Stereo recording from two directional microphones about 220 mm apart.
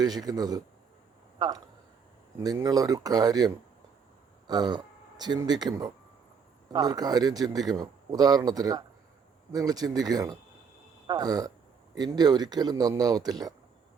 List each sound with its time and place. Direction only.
0.0 s speech: 15° right (ahead or behind)